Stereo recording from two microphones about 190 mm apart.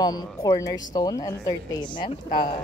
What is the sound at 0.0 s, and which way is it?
Speech, 20° left (ahead or behind).